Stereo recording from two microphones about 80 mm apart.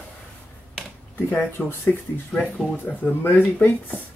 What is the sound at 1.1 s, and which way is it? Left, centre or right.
Speech, left.